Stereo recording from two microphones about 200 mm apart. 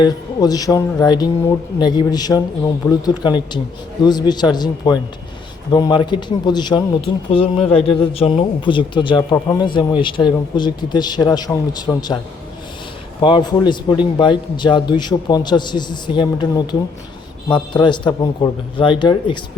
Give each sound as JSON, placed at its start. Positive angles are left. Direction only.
{"t": 0.0, "sound": "speech", "side_deg": 20}
{"t": 13.2, "sound": "speech", "side_deg": 25}
{"t": 17.5, "sound": "speech", "side_deg": 20}